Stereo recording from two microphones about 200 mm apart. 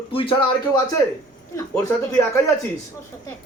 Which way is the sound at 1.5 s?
15° left (ahead or behind).